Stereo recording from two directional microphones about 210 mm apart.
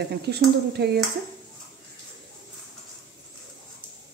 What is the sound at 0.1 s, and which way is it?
Speech, 50° right (ahead or behind).